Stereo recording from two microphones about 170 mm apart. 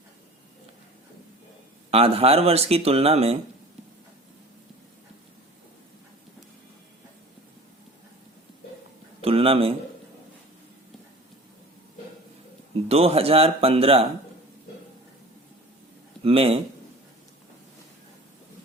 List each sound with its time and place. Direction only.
1.9 s speech: 35° right (ahead or behind)
9.2 s a sound: 35° right (ahead or behind)
12.9 s speech: 35° right (ahead or behind)
16.2 s speech: 35° right (ahead or behind)